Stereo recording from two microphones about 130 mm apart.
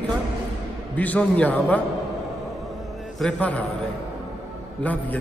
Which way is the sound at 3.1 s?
5° left (ahead or behind).